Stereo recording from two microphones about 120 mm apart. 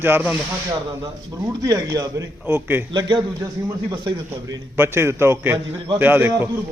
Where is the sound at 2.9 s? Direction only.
35° right (ahead or behind).